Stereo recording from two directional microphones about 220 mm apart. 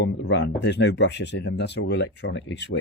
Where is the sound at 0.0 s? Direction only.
50° left (ahead or behind).